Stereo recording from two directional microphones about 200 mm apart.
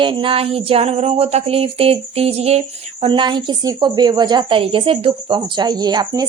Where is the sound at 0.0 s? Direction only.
25° right (ahead or behind).